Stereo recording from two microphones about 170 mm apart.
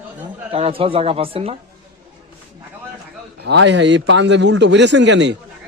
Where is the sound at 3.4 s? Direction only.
90° right.